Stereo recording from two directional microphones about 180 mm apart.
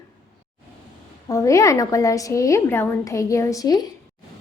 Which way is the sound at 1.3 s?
20° left (ahead or behind).